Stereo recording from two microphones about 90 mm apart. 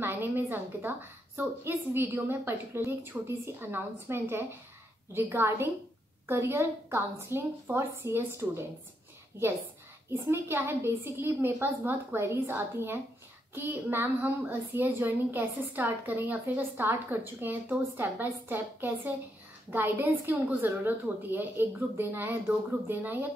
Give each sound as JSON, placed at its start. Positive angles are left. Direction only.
{"t": 0.0, "sound": "a child's voice", "side_deg": -25}
{"t": 10.0, "sound": "a child's voice", "side_deg": -30}